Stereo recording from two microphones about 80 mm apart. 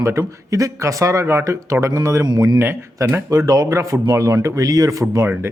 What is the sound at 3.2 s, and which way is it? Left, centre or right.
Speech, right.